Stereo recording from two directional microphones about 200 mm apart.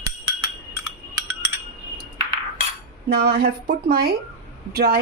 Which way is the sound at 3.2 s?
50° right (ahead or behind).